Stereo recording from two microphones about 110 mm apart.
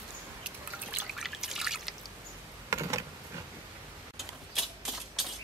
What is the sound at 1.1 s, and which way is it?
Trickle, 5° right (ahead or behind).